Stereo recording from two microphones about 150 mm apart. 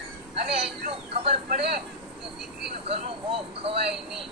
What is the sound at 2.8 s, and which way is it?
Speech, 40° right (ahead or behind).